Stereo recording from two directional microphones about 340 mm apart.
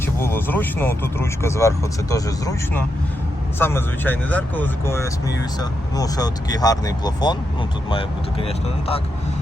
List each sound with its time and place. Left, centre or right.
0.0 s speech: centre